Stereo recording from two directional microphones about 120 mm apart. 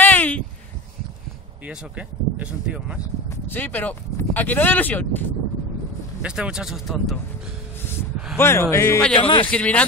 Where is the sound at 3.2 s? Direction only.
15° left (ahead or behind).